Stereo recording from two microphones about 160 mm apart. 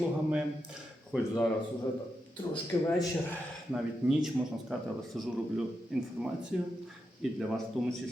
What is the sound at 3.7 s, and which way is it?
Speech, 5° right (ahead or behind).